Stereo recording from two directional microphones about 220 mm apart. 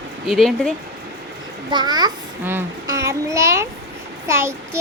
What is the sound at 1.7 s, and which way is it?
A child's voice, 20° right (ahead or behind).